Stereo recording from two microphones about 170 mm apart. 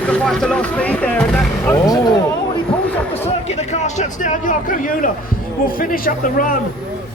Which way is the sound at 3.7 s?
45° left (ahead or behind).